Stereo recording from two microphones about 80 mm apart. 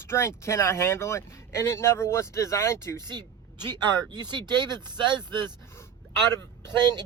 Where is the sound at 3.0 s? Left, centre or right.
Right.